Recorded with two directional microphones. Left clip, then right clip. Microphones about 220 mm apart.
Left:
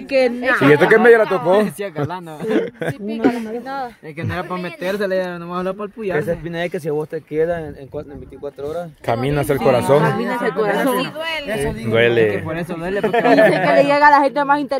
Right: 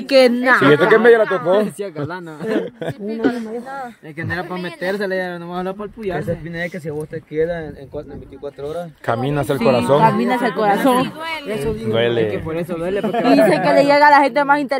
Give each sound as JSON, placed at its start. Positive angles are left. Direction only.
{"t": 0.1, "sound": "speech", "side_deg": -55}
{"t": 0.7, "sound": "a man's voice", "side_deg": 20}
{"t": 3.3, "sound": "speech", "side_deg": 45}
{"t": 4.2, "sound": "a man's voice", "side_deg": 25}
{"t": 9.0, "sound": "speech", "side_deg": 10}
{"t": 10.0, "sound": "speech", "side_deg": -35}
{"t": 11.2, "sound": "a man's voice", "side_deg": 20}
{"t": 11.6, "sound": "speech", "side_deg": 30}
{"t": 11.9, "sound": "speech", "side_deg": 15}
{"t": 12.4, "sound": "speech", "side_deg": 35}
{"t": 13.5, "sound": "speech", "side_deg": -25}